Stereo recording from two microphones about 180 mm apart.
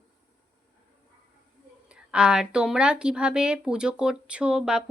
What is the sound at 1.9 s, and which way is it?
Speech, 5° right (ahead or behind).